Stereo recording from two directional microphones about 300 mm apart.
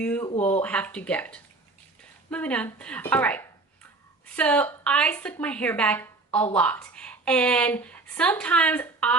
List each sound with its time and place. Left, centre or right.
0.0 s a woman's voice: centre